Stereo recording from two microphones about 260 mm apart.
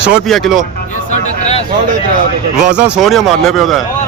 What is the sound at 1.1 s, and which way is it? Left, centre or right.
Speech, left.